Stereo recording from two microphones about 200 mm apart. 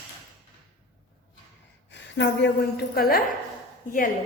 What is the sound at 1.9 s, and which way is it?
A woman's voice, 60° left (ahead or behind).